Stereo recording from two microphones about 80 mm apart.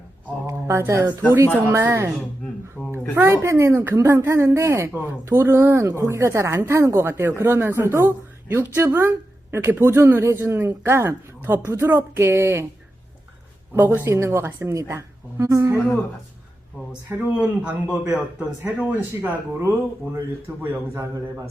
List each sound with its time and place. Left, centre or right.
0.4 s a sound: right
1.7 s speech: right
2.8 s a sound: centre
3.4 s speech: right
13.7 s speech: right
17.1 s a man's voice: centre